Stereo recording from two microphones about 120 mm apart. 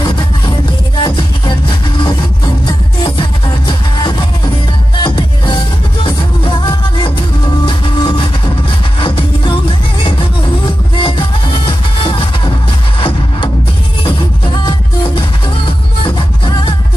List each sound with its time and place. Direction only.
1.0 s music: 40° left (ahead or behind)
11.0 s music: 45° left (ahead or behind)
14.6 s music: 40° left (ahead or behind)